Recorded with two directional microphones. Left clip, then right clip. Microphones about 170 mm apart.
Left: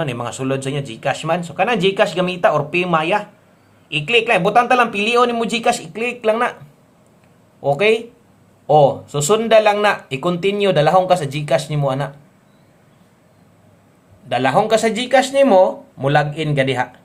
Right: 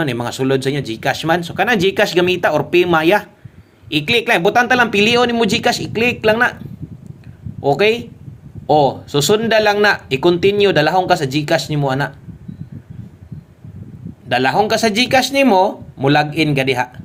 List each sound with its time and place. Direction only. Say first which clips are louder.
0.1 s speech: right 4 dB; 25° right (ahead or behind)
7.6 s speech: right 1 dB; 20° right (ahead or behind)
14.3 s a man's voice: right 1 dB; 20° right (ahead or behind)